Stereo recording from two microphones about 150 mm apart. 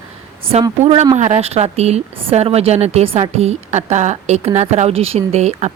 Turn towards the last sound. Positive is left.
turn(degrees=-45)  # may be behind; listen again after turning